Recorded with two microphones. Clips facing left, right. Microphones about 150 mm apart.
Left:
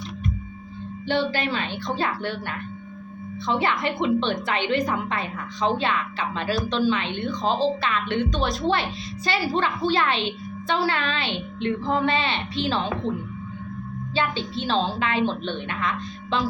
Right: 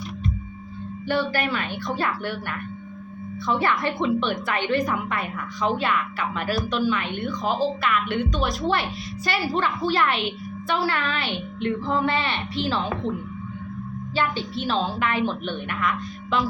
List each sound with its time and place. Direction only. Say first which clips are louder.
1.0 s a woman's voice: even; 20° left (ahead or behind)
14.2 s a woman's voice: even; 20° left (ahead or behind)